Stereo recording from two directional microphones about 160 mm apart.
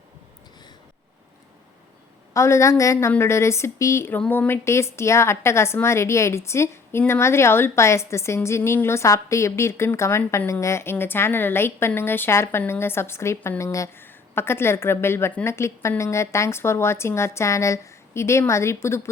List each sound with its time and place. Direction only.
2.3 s a woman's voice: 20° left (ahead or behind)